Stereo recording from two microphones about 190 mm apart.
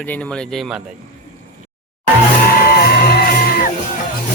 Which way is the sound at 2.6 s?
55° left (ahead or behind).